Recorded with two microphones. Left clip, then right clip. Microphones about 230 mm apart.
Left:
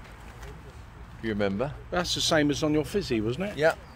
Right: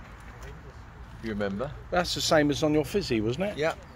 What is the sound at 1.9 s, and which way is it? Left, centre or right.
Speech, centre.